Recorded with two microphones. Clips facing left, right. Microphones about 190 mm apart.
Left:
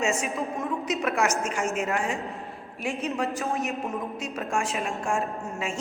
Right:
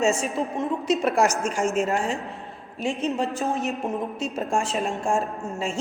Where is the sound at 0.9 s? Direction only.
30° right (ahead or behind).